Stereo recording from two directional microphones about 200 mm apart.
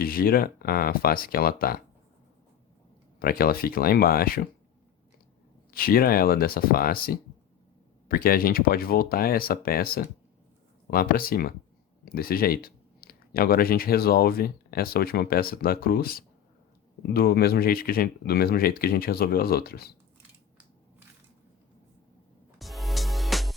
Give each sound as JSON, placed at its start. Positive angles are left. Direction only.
{"t": 0.0, "sound": "speech", "side_deg": 45}
{"t": 3.2, "sound": "speech", "side_deg": 50}
{"t": 5.7, "sound": "speech", "side_deg": 50}
{"t": 22.5, "sound": "music", "side_deg": 0}